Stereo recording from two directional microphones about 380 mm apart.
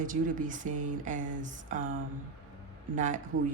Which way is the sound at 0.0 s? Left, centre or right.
Right.